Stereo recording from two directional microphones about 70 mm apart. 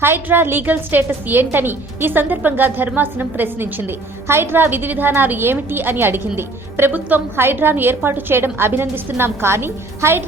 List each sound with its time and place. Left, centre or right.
0.0 s a woman's voice: right